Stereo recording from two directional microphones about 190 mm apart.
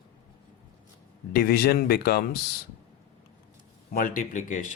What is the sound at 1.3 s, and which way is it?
Speech, 55° left (ahead or behind).